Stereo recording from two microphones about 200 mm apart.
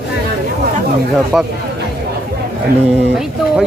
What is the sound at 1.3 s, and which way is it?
Speech, 5° right (ahead or behind).